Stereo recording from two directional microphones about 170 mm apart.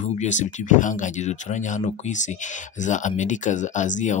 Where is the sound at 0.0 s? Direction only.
45° left (ahead or behind).